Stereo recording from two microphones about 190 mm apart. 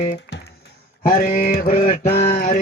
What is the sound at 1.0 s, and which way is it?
Mantra, 50° left (ahead or behind).